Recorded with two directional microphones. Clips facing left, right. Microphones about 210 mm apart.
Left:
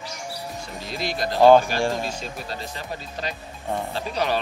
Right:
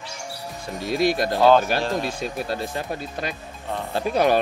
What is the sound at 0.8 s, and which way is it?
Speech, 50° right (ahead or behind).